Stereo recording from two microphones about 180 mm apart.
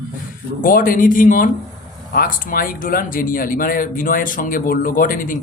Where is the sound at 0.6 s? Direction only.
50° left (ahead or behind).